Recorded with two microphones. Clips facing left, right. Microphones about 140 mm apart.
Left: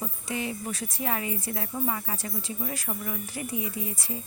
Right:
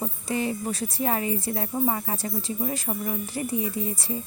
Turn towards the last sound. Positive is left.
turn(degrees=-35)  # may be behind; listen again after turning